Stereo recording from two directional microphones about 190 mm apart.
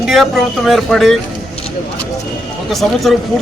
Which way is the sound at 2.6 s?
Centre (ahead or behind).